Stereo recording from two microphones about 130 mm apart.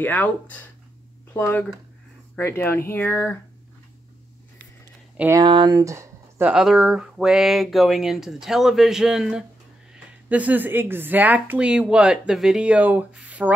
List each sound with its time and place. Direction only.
0.0 s speech: 15° left (ahead or behind)
5.3 s speech: 35° right (ahead or behind); by 6.5 s 20° right (ahead or behind)
6.5 s speech: 5° right (ahead or behind)